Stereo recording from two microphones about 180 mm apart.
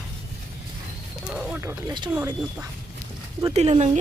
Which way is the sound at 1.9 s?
25° right (ahead or behind).